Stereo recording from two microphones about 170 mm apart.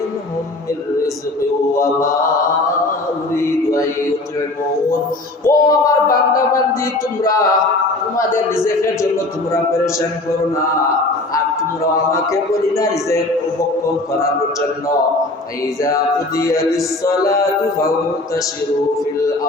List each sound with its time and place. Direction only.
1.8 s speech: 15° left (ahead or behind)
3.3 s speech: 15° left (ahead or behind)
5.5 s speech: 20° left (ahead or behind)
8.6 s speech: 15° left (ahead or behind)
12.1 s speech: 15° left (ahead or behind)
15.8 s speech: 20° left (ahead or behind)